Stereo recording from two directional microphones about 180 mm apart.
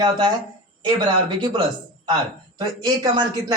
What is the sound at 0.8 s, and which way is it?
A man's voice, 25° right (ahead or behind).